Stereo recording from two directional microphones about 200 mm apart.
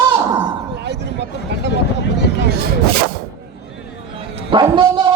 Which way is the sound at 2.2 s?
55° right (ahead or behind).